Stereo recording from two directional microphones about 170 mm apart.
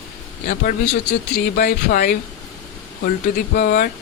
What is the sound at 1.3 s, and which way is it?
Speech, 60° left (ahead or behind).